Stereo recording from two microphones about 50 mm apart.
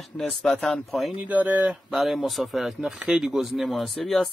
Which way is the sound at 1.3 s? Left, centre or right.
Right.